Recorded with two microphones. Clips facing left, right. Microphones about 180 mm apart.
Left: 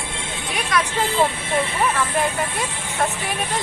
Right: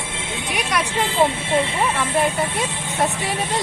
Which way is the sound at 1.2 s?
25° right (ahead or behind).